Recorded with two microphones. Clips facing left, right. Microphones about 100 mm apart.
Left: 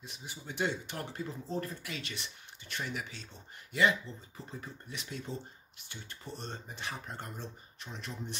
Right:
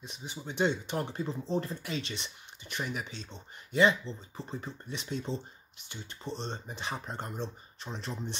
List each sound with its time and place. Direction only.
0.0 s speech: 20° right (ahead or behind)